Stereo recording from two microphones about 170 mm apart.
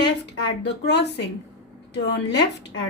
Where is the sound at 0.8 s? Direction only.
85° left.